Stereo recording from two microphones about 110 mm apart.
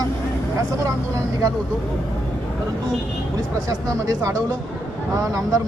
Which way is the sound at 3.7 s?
30° right (ahead or behind).